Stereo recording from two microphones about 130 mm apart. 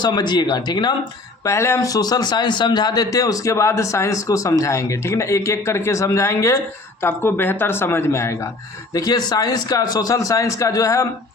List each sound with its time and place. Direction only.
0.0 s speech: 35° left (ahead or behind)
1.5 s speech: 20° left (ahead or behind)